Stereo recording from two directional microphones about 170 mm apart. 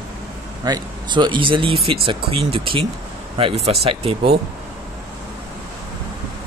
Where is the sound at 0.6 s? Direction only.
25° right (ahead or behind).